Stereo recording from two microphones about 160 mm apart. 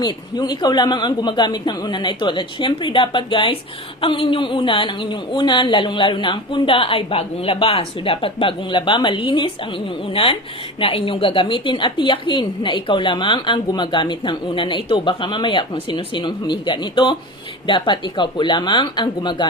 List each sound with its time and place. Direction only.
0.0 s a man's voice: 25° left (ahead or behind)